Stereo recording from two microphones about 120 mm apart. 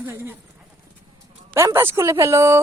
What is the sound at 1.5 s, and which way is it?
A woman's voice, 20° right (ahead or behind).